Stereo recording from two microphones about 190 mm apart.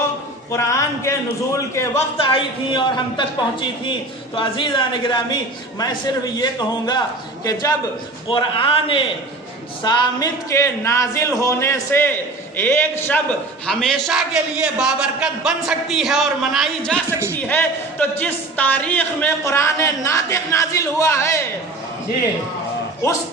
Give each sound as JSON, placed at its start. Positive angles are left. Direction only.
{"t": 0.5, "sound": "speech", "side_deg": 15}
{"t": 2.2, "sound": "a man's voice", "side_deg": 25}
{"t": 17.1, "sound": "speech", "side_deg": -15}
{"t": 17.3, "sound": "speech", "side_deg": 10}